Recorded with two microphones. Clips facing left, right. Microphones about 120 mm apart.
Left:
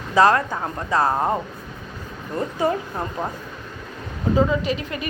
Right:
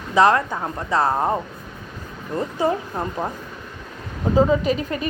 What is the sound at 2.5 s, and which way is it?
Speech, 20° right (ahead or behind).